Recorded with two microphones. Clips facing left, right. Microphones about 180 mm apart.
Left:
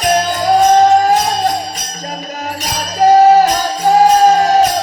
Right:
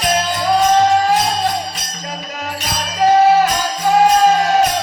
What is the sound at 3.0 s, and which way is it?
Music, 40° left (ahead or behind).